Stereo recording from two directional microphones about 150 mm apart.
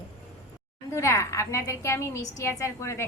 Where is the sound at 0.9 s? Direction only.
20° left (ahead or behind).